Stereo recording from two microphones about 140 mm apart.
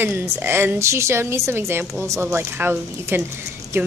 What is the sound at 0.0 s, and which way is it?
A woman's voice, 15° right (ahead or behind).